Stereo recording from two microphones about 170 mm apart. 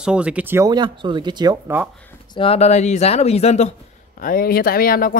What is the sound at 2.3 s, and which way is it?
Speech, 35° left (ahead or behind).